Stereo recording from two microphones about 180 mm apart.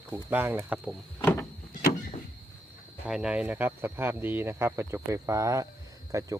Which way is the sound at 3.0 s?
5° right (ahead or behind).